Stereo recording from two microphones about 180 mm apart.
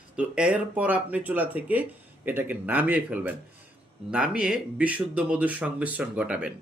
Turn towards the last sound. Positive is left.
turn(degrees=-5)  # may be behind; listen again after turning